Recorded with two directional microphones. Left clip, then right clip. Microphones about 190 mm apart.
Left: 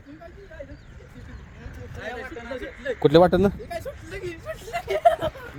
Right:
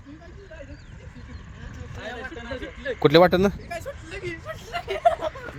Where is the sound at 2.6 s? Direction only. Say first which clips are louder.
Even; 10° left (ahead or behind).